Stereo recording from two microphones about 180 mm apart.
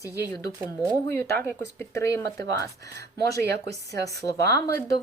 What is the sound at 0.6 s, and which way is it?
Speech, 15° right (ahead or behind).